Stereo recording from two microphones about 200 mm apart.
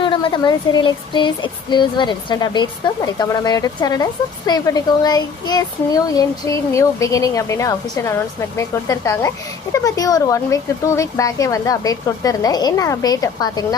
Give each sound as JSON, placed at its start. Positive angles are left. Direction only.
{"t": 0.0, "sound": "speech", "side_deg": 25}